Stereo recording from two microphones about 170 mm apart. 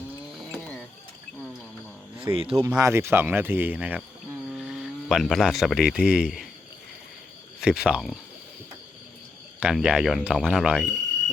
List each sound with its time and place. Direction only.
0.5 s a sound: 5° left (ahead or behind)
2.3 s speech: 35° right (ahead or behind)
2.6 s speech: 15° right (ahead or behind)
7.6 s speech: 5° right (ahead or behind)
9.6 s speech: 5° right (ahead or behind)